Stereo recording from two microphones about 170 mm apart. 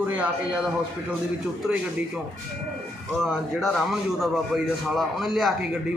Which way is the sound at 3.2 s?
Centre (ahead or behind).